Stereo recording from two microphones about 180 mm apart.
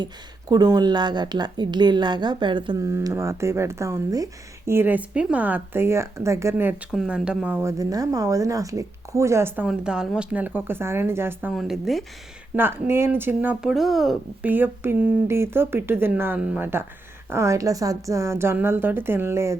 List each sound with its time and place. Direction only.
0.0 s speech: 20° right (ahead or behind)
9.6 s speech: 5° right (ahead or behind)
11.5 s speech: centre (ahead or behind)
12.5 s speech: 10° right (ahead or behind)
14.5 s speech: 10° right (ahead or behind)